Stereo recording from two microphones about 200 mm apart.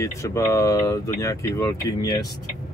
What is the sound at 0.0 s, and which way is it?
Speech, 15° left (ahead or behind).